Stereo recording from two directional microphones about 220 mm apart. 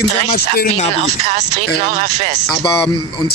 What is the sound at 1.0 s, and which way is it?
Speech, 30° right (ahead or behind).